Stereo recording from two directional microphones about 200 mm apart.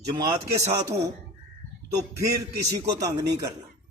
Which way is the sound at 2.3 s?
15° right (ahead or behind).